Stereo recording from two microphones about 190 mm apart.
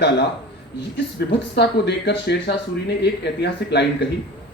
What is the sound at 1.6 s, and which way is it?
A man's voice, 65° left (ahead or behind).